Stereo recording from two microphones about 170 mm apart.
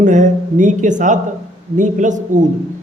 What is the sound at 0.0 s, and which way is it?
Speech, 50° right (ahead or behind).